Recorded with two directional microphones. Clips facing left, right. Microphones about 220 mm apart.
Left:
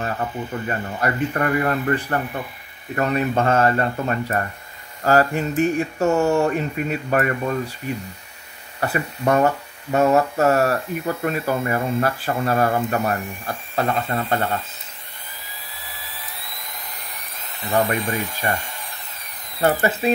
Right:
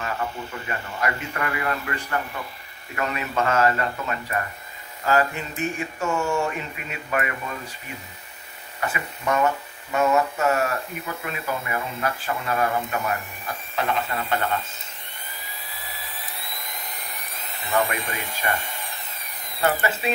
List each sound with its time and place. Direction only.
0.0 s hum: 35° left (ahead or behind)
5.0 s speech: 40° left (ahead or behind)
8.8 s hum: 40° left (ahead or behind)
17.8 s speech: 45° left (ahead or behind)
18.4 s hum: 40° left (ahead or behind)
19.6 s hum: 40° left (ahead or behind)